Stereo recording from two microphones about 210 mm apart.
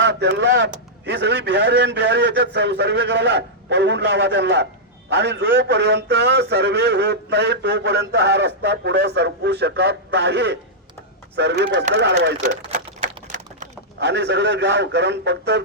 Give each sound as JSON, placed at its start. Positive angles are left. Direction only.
{"t": 0.0, "sound": "a man's voice", "side_deg": -55}
{"t": 13.2, "sound": "a sound", "side_deg": -35}
{"t": 14.0, "sound": "a man's voice", "side_deg": -55}